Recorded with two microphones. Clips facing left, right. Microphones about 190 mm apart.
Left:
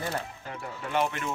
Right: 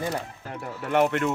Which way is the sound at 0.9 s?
60° right (ahead or behind).